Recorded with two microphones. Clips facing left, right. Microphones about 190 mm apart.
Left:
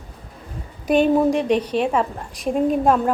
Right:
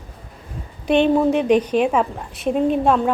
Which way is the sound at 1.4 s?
30° left (ahead or behind).